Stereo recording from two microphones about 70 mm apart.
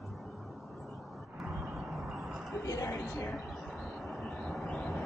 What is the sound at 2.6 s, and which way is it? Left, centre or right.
Speech, left.